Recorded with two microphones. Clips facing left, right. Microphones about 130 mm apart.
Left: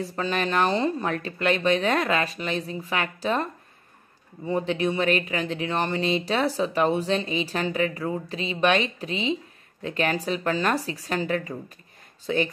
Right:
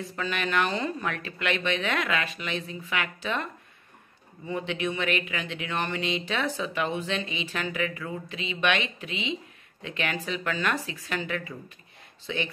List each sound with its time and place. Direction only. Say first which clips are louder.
0.0 s speech: left 4 dB; 35° left (ahead or behind)
4.5 s speech: left 5 dB; 35° left (ahead or behind)